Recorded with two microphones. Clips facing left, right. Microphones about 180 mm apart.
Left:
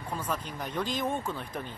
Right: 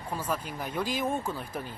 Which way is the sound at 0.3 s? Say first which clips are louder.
Right 2 dB; 10° right (ahead or behind).